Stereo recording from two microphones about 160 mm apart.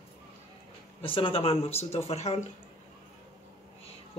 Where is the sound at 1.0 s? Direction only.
35° left (ahead or behind).